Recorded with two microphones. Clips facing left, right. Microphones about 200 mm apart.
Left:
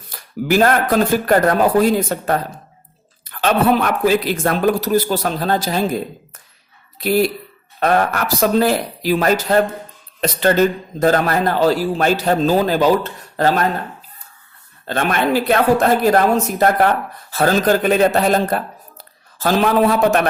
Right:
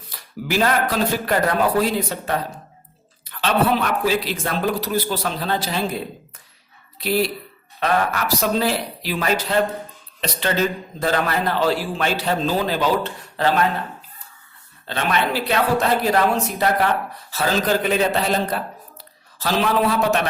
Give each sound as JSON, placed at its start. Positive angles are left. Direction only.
{"t": 0.1, "sound": "a man's voice", "side_deg": 50}
{"t": 7.8, "sound": "a man's voice", "side_deg": 45}
{"t": 14.8, "sound": "a man's voice", "side_deg": 50}